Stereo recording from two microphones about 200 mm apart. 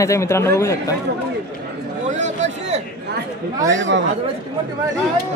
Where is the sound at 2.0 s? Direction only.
35° right (ahead or behind).